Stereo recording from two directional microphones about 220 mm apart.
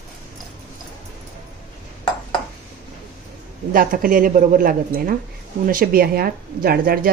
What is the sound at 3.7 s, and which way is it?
Speech, 40° right (ahead or behind).